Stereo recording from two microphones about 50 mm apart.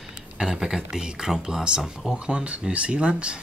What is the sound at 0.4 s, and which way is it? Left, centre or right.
Speech, centre.